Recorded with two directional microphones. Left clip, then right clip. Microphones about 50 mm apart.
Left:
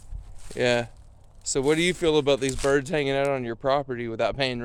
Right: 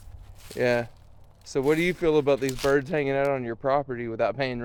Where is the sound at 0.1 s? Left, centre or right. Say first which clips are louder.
Even; right.